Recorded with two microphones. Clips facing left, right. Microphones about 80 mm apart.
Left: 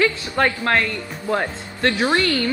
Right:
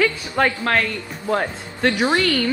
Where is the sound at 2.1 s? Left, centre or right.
Left.